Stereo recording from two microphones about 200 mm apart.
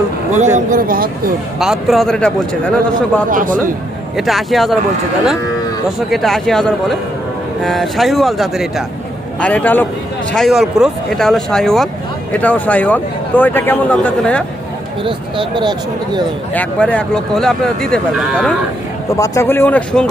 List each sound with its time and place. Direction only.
0.3 s speech: 35° right (ahead or behind)
1.5 s speech: centre (ahead or behind)
3.2 s speech: 40° right (ahead or behind)
4.3 s speech: centre (ahead or behind)
6.1 s speech: centre (ahead or behind)
15.0 s speech: 25° right (ahead or behind)
16.6 s speech: 5° left (ahead or behind)
19.2 s speech: 15° left (ahead or behind)